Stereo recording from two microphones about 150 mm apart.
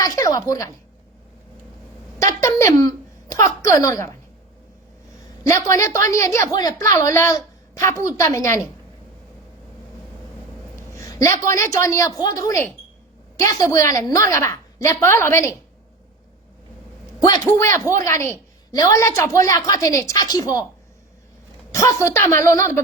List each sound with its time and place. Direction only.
0.0 s a woman's voice: 20° left (ahead or behind)
2.1 s a woman's voice: 20° left (ahead or behind)
5.4 s a woman's voice: 20° left (ahead or behind)
10.8 s a woman's voice: 20° left (ahead or behind)
17.1 s a man's voice: 20° left (ahead or behind)
21.7 s a woman's voice: 20° left (ahead or behind)